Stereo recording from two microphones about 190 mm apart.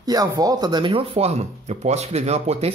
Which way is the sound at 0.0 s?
20° right (ahead or behind).